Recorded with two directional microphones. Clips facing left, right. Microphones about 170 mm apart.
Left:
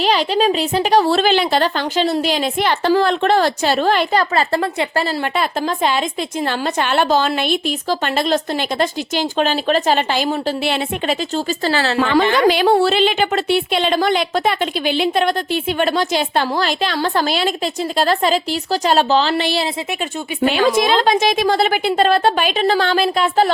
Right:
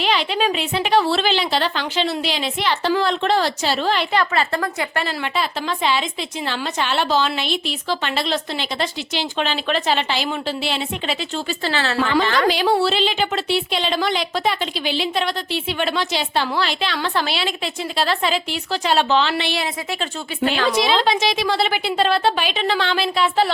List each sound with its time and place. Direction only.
0.0 s a woman's voice: 40° left (ahead or behind)
5.2 s a woman's voice: 50° left (ahead or behind)
12.2 s a woman's voice: 20° left (ahead or behind)
12.5 s a woman's voice: 55° left (ahead or behind); by 19.6 s 35° left (ahead or behind)
20.7 s a woman's voice: 50° left (ahead or behind)